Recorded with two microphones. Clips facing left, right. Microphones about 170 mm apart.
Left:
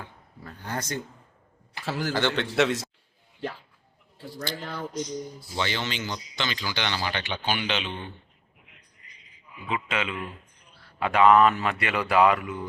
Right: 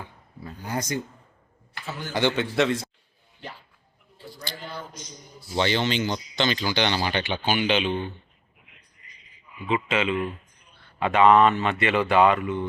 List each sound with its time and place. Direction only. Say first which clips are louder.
0.3 s speech: right 3 dB; 10° right (ahead or behind)
1.8 s a man's voice: left 6 dB; 90° left
2.1 s a man's voice: right 4 dB; 10° right (ahead or behind)
2.6 s speech: even; centre (ahead or behind)
4.4 s speech: left 4 dB; 70° left (ahead or behind)
5.5 s speech: right 7 dB; 25° right (ahead or behind); by 7.9 s 10° right (ahead or behind)
9.6 s speech: right 5 dB; centre (ahead or behind)